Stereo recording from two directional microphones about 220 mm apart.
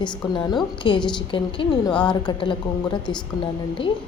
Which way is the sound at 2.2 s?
20° left (ahead or behind).